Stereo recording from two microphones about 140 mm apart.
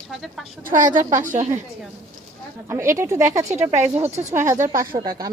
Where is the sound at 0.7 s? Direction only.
65° right (ahead or behind).